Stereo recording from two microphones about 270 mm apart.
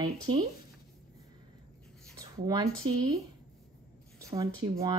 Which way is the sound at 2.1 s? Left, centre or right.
Centre.